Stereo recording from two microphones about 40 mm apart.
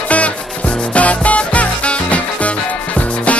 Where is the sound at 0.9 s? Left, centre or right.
Left.